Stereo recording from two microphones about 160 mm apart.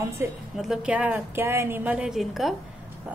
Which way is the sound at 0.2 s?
15° right (ahead or behind).